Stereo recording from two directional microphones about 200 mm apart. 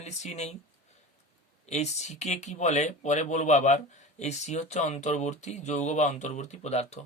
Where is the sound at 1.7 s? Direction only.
35° left (ahead or behind).